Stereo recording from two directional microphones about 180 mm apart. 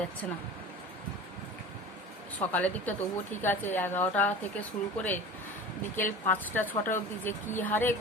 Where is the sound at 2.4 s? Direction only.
10° left (ahead or behind).